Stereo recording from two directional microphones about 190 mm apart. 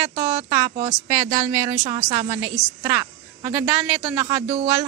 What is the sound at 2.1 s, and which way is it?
Speech, 35° right (ahead or behind).